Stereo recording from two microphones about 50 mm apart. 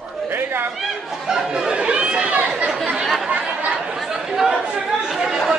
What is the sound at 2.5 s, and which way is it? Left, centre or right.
Speech, centre.